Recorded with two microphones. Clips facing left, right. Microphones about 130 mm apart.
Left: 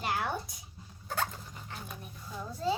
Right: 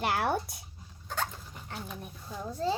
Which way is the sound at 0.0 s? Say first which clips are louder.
Right 4 dB; 65° right (ahead or behind).